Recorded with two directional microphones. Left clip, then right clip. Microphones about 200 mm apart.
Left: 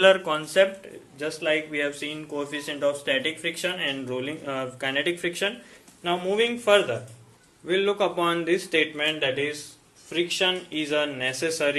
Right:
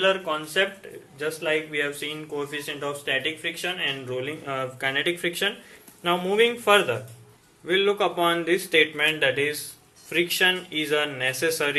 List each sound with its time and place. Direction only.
0.0 s speech: 40° left (ahead or behind)
1.2 s speech: 5° left (ahead or behind)
7.7 s speech: 10° left (ahead or behind)
9.0 s speech: 5° right (ahead or behind)